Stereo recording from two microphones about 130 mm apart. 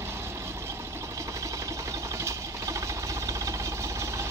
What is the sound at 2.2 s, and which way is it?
Sewing machine, 25° right (ahead or behind).